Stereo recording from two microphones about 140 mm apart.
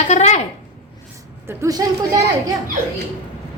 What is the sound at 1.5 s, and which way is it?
Speech, 25° right (ahead or behind).